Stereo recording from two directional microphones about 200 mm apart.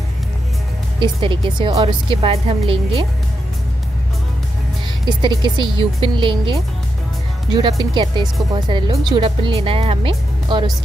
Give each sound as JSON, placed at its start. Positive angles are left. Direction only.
{"t": 0.9, "sound": "speech", "side_deg": -25}
{"t": 5.0, "sound": "speech", "side_deg": -20}
{"t": 7.5, "sound": "speech", "side_deg": -20}